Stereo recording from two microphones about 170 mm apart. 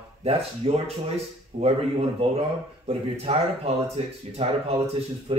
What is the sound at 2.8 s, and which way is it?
A man's voice, 35° right (ahead or behind).